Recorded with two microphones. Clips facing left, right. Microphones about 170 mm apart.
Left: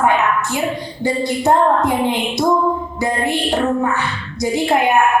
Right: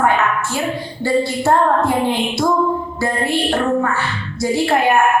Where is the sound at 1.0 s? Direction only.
15° left (ahead or behind).